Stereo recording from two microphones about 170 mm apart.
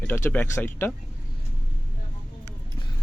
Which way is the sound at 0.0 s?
10° left (ahead or behind).